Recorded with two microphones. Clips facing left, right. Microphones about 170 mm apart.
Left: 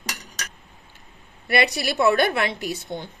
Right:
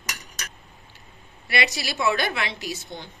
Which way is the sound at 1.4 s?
55° left (ahead or behind).